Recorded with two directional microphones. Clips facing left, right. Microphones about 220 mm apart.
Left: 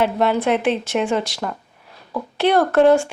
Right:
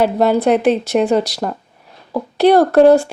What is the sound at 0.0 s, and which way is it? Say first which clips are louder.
Speech: right 5 dB; 40° right (ahead or behind).